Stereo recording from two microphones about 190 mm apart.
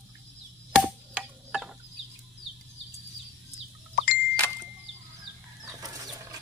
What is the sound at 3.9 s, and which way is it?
Ding, 55° left (ahead or behind).